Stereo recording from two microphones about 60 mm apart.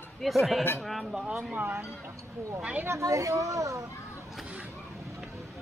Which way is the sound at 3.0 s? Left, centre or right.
Right.